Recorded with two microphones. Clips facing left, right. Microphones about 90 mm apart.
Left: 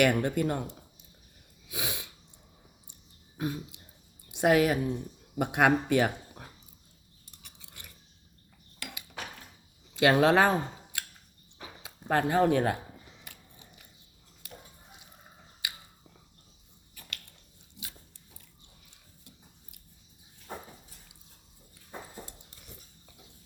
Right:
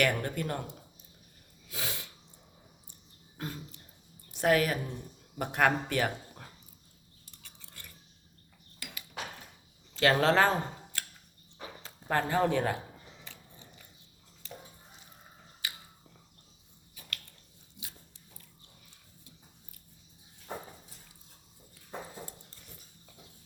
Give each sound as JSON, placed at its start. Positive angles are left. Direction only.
{"t": 0.0, "sound": "speech", "side_deg": 15}
{"t": 1.6, "sound": "wheeze", "side_deg": 15}
{"t": 3.3, "sound": "speech", "side_deg": 15}
{"t": 7.3, "sound": "a sound", "side_deg": 15}
{"t": 8.8, "sound": "cutlery", "side_deg": 60}
{"t": 9.9, "sound": "speech", "side_deg": 15}
{"t": 11.8, "sound": "a sound", "side_deg": 15}
{"t": 12.5, "sound": "speech", "side_deg": 10}